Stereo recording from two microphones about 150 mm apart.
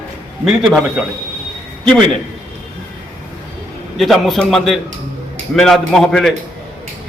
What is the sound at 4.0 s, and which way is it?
A man's voice, centre (ahead or behind).